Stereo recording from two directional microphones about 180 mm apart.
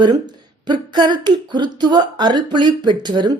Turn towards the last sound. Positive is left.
turn(degrees=-25)  # may be behind; listen again after turning